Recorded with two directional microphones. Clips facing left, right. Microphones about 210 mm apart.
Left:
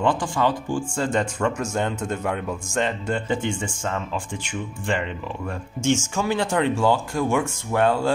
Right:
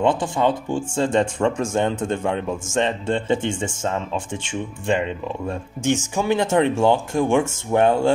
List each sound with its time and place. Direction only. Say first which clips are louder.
0.0 s a man's voice: right 3 dB; 25° right (ahead or behind)